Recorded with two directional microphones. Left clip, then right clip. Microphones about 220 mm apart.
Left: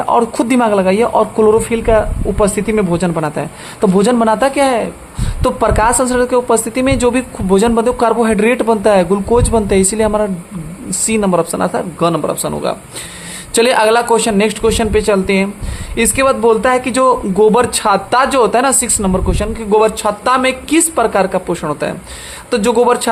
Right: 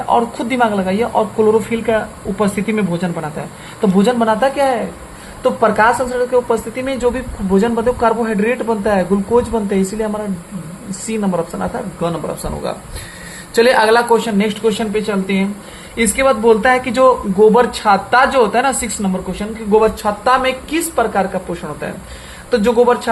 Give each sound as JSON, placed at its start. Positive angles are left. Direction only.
{"t": 0.1, "sound": "speech", "side_deg": 45}